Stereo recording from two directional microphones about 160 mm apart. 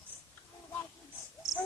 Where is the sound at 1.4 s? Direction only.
Centre (ahead or behind).